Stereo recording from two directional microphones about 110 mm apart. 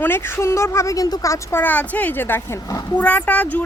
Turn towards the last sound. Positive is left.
turn(degrees=15)  # may be behind; listen again after turning